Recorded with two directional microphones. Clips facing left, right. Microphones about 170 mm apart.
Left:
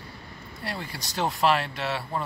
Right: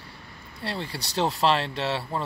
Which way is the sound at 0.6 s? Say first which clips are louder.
Right 3 dB; 30° right (ahead or behind).